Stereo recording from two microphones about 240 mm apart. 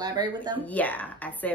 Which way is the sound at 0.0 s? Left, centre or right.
Centre.